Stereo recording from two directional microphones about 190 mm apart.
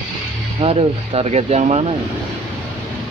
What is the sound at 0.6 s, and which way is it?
Speech, 30° right (ahead or behind).